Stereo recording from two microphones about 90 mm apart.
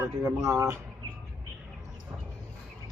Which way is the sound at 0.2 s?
35° right (ahead or behind).